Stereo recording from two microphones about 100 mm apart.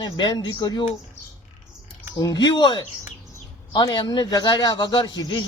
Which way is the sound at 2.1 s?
45° left (ahead or behind).